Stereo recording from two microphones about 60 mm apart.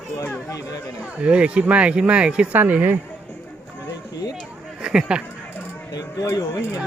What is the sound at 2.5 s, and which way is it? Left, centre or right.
Speech, right.